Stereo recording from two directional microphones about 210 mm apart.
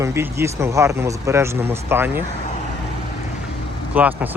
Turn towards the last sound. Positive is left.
turn(degrees=-10)  # may be behind; listen again after turning